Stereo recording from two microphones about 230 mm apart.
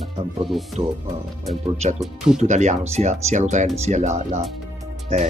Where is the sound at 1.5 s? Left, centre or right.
Right.